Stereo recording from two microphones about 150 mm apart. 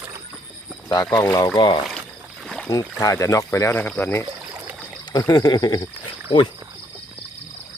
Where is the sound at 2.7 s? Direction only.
25° left (ahead or behind).